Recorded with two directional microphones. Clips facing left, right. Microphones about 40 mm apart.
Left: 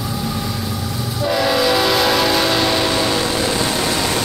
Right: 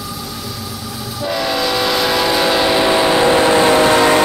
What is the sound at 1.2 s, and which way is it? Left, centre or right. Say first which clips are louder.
Train: left 2 dB; centre.